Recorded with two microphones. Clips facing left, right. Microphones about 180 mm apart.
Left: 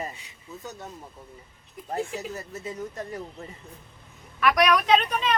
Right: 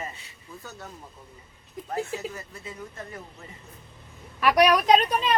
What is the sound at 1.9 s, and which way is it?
Speech, 40° left (ahead or behind).